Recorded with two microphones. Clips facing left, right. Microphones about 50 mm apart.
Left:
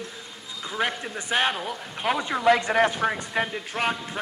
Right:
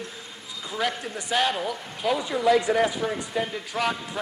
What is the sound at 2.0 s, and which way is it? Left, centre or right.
Speech, left.